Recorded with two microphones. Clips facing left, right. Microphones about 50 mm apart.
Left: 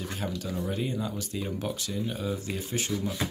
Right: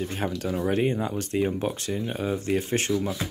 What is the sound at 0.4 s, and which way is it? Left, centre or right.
Speech, right.